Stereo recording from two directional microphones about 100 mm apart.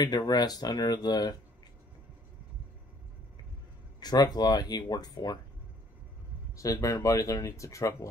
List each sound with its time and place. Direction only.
0.0 s speech: 45° left (ahead or behind)
4.0 s speech: 45° left (ahead or behind)
6.5 s speech: 35° left (ahead or behind)